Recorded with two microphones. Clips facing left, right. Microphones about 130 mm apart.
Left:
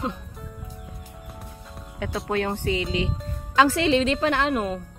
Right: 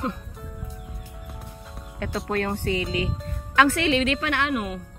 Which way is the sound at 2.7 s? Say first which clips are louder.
Even; 25° left (ahead or behind).